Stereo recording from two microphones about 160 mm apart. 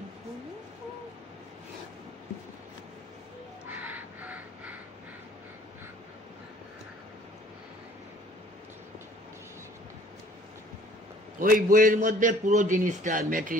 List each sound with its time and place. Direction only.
3.6 s crow: 10° right (ahead or behind)
11.3 s a man's voice: 60° right (ahead or behind)